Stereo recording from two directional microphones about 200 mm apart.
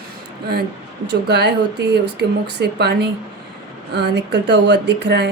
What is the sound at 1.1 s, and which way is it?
A woman's voice, 60° right (ahead or behind).